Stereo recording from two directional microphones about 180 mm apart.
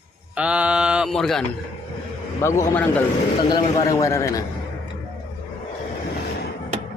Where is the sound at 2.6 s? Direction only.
10° left (ahead or behind).